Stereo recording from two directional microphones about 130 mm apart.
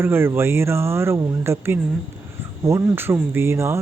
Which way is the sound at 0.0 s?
20° right (ahead or behind).